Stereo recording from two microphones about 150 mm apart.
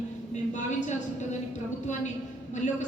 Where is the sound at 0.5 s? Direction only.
55° left (ahead or behind).